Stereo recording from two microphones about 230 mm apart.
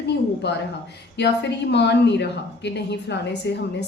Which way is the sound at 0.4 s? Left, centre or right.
Left.